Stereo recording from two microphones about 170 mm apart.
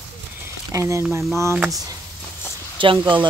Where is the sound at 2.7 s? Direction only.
30° right (ahead or behind).